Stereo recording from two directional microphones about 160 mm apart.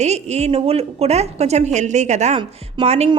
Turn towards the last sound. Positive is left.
turn(degrees=-40)  # may be behind; listen again after turning